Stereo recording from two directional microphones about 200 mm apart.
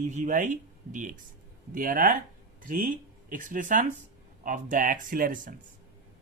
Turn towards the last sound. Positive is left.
turn(degrees=-45)  # may be behind; listen again after turning